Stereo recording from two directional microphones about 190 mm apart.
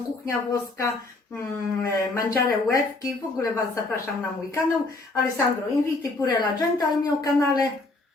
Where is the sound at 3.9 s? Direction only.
15° left (ahead or behind).